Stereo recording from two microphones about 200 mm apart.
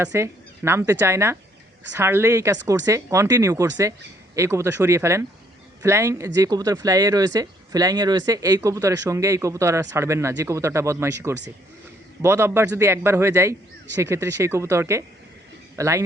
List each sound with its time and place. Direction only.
0.0 s speech: 15° right (ahead or behind)